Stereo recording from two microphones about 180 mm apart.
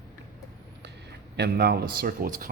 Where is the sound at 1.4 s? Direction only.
65° right (ahead or behind).